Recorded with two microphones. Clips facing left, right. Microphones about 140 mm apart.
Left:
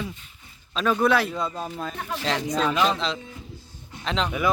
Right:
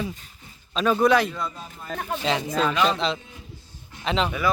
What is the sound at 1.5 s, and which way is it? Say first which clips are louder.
Speech: left 8 dB; 45° left (ahead or behind).